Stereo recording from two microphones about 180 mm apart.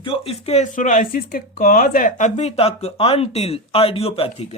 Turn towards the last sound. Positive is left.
turn(degrees=30)  # may be behind; listen again after turning